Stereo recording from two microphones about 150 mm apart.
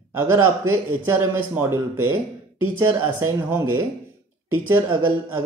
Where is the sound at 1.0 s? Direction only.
15° right (ahead or behind).